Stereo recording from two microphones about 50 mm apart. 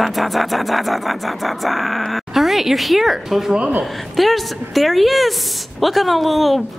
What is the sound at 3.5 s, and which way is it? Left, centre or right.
Speech, right.